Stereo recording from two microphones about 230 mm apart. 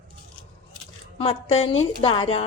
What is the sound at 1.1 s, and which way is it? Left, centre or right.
A woman's voice, left.